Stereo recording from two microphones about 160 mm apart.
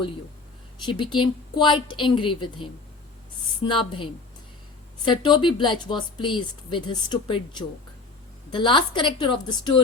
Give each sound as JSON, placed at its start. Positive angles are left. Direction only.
{"t": 0.9, "sound": "a woman's voice", "side_deg": 30}
{"t": 3.7, "sound": "a woman's voice", "side_deg": 30}
{"t": 8.5, "sound": "a woman's voice", "side_deg": 30}